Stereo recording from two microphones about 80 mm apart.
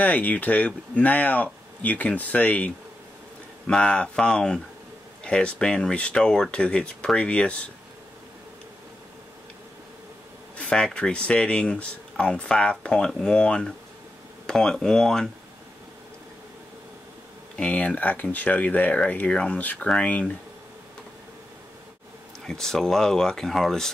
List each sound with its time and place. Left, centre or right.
0.0 s speech: centre
3.6 s speech: centre
10.6 s speech: centre
17.6 s speech: centre
22.5 s speech: centre